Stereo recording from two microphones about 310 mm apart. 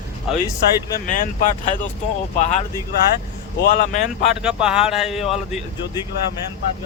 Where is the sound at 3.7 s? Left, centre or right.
Left.